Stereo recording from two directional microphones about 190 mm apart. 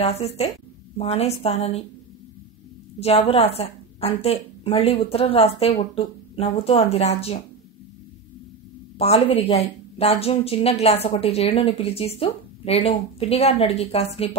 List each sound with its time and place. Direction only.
0.0 s a woman's voice: 35° left (ahead or behind)
3.0 s a woman's voice: 30° left (ahead or behind)
8.9 s a woman's voice: 30° left (ahead or behind)